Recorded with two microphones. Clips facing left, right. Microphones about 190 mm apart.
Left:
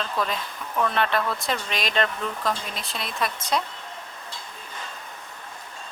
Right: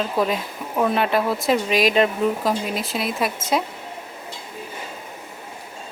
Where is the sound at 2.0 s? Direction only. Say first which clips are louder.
Right 7 dB; 15° right (ahead or behind).